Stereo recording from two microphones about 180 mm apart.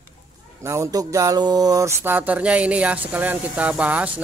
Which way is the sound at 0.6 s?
15° right (ahead or behind).